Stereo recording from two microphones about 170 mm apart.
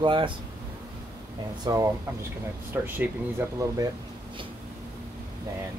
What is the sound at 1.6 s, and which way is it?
Speech, 20° right (ahead or behind).